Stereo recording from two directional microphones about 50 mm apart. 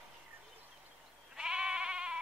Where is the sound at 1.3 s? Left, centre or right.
Centre.